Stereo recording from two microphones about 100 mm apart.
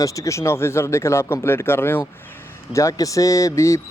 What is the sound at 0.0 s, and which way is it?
Speech, 30° left (ahead or behind).